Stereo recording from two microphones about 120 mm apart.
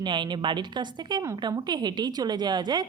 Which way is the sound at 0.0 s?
40° right (ahead or behind).